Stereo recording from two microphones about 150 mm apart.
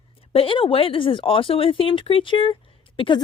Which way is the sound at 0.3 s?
35° left (ahead or behind).